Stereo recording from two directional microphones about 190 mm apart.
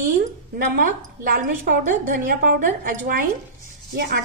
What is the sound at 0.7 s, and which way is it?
A woman's voice, 45° right (ahead or behind).